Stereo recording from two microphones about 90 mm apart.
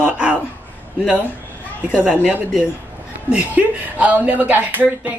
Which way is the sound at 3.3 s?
15° right (ahead or behind).